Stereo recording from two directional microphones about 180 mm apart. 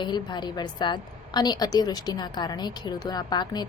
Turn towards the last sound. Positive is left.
turn(degrees=25)  # may be behind; listen again after turning